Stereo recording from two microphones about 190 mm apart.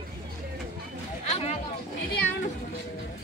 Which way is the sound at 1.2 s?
35° left (ahead or behind).